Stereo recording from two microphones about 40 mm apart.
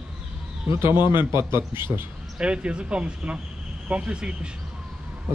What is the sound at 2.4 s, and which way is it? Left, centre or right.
Speech, right.